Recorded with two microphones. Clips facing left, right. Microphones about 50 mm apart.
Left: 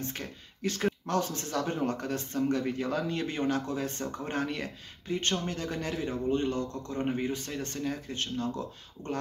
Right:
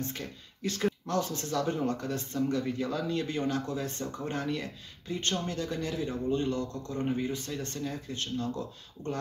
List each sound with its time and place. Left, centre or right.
0.1 s a man's voice: left